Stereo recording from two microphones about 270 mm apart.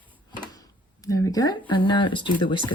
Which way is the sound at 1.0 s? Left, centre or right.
Centre.